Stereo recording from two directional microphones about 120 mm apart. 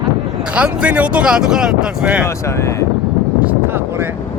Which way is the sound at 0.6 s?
10° right (ahead or behind).